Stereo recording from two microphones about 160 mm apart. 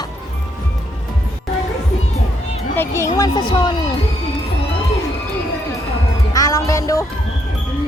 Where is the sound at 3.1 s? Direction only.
25° left (ahead or behind).